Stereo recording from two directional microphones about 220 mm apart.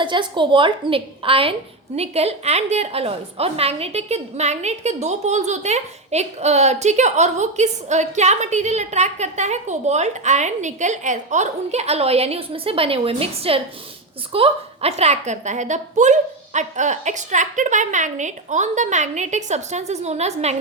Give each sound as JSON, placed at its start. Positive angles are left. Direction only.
{"t": 0.0, "sound": "a woman's voice", "side_deg": -20}